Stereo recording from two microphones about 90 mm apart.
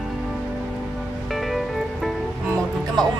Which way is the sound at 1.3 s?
Centre (ahead or behind).